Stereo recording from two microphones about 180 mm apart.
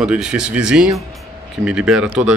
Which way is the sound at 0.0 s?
5° right (ahead or behind).